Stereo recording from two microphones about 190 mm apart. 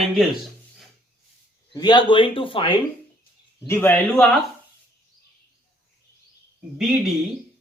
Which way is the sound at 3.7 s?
10° left (ahead or behind).